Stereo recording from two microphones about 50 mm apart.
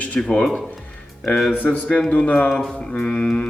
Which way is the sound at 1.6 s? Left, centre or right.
Left.